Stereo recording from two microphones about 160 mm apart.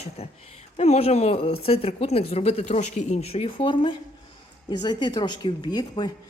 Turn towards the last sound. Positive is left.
turn(degrees=25)  # may be behind; listen again after turning